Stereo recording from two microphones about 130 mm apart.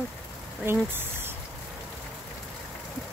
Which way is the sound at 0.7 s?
15° right (ahead or behind).